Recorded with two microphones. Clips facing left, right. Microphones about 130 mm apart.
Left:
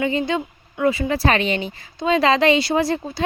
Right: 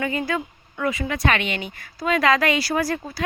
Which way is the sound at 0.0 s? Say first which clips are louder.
Left 4 dB; 25° left (ahead or behind).